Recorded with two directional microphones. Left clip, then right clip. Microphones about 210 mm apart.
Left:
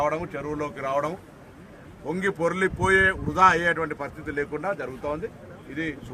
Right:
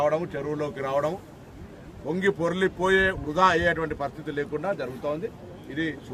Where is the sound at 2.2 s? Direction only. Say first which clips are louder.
Even; centre (ahead or behind).